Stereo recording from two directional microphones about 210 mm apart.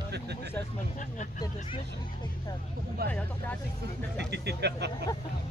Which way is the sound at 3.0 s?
45° right (ahead or behind).